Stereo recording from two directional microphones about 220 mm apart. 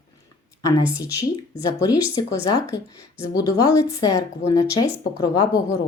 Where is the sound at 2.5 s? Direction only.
15° left (ahead or behind).